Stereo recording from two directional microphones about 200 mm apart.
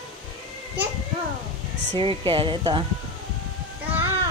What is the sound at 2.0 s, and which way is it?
Speech, 25° right (ahead or behind).